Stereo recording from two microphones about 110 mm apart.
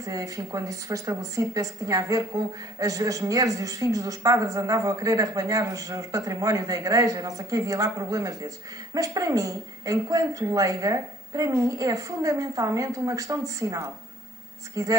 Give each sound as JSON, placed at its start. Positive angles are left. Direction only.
{"t": 0.0, "sound": "speech", "side_deg": -30}